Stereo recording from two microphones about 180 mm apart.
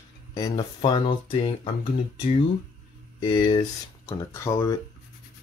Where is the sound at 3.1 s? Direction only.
25° left (ahead or behind).